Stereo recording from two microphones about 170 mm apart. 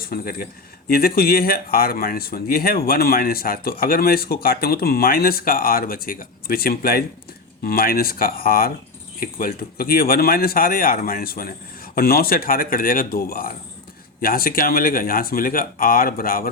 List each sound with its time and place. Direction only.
0.0 s speech: 60° left (ahead or behind)